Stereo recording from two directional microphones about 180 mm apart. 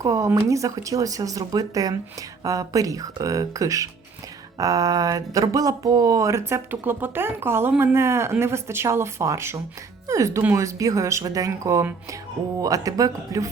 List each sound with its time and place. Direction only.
0.0 s speech: 15° right (ahead or behind)